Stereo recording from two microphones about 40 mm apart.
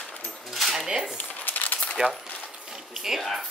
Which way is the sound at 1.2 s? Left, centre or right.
Left.